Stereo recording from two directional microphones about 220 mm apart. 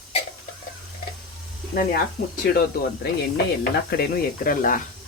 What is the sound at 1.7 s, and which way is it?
Speech, 45° left (ahead or behind).